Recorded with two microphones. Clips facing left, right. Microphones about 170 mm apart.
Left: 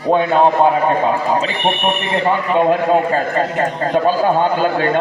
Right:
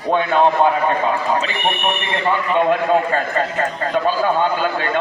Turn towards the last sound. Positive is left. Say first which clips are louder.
# left 4 dB
turn(degrees=45)  # may be behind; listen again after turning